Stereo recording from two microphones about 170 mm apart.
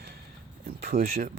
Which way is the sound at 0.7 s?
60° right (ahead or behind).